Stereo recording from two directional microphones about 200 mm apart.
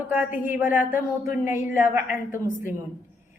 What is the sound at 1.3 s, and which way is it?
A woman's voice, 10° right (ahead or behind).